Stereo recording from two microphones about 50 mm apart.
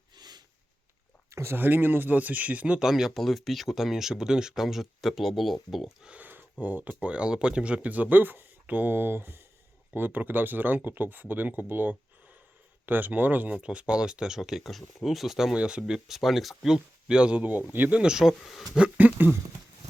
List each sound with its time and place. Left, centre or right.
1.3 s a sound: right
1.5 s speech: right
2.9 s speech: centre
6.1 s speech: right
8.1 s speech: right
8.9 s speech: right
13.6 s speech: right; by 15.5 s centre
15.5 s speech: centre
16.0 s speech: centre
16.7 s speech: centre
17.4 s speech: right
17.9 s speech: centre
18.9 s speech: right